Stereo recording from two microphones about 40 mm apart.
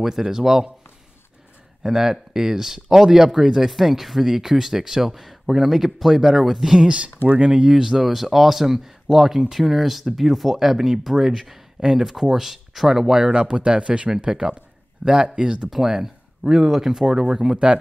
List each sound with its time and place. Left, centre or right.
0.0 s speech: centre
1.8 s speech: centre
7.2 s speech: right
7.8 s speech: centre
13.3 s speech: right
15.7 s speech: centre
17.0 s speech: right